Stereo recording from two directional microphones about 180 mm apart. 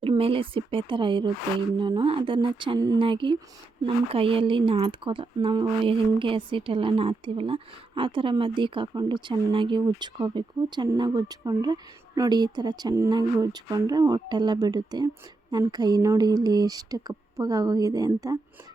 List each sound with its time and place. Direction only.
0.0 s a woman's voice: 30° right (ahead or behind)